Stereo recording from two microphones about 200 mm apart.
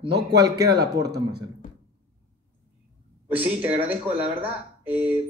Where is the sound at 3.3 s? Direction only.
10° right (ahead or behind).